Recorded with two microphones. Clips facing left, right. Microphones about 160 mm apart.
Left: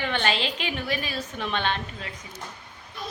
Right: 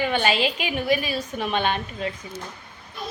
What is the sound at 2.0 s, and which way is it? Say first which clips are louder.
Speech: right 10 dB; 20° right (ahead or behind).